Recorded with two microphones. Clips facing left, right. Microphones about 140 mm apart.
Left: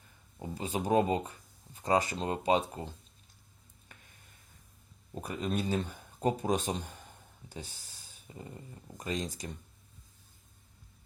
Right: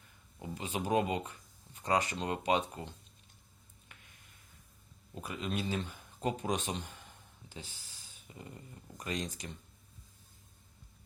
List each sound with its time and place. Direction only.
0.3 s speech: 30° left (ahead or behind)
5.1 s speech: 40° left (ahead or behind)